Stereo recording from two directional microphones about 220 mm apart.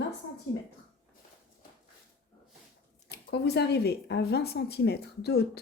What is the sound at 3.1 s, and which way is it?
Speech, 50° left (ahead or behind).